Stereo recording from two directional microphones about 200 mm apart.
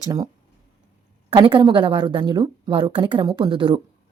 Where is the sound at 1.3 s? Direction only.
20° right (ahead or behind).